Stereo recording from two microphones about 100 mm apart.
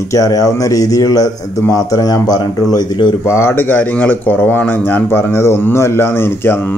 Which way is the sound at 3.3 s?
25° left (ahead or behind).